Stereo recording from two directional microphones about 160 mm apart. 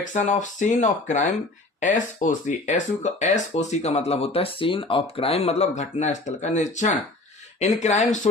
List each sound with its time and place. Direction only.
0.1 s speech: 50° left (ahead or behind)